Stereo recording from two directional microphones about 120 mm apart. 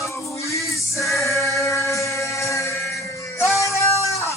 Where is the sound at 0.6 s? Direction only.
Centre (ahead or behind).